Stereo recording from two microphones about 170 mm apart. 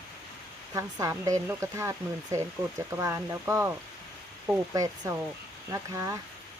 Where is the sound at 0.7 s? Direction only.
20° right (ahead or behind).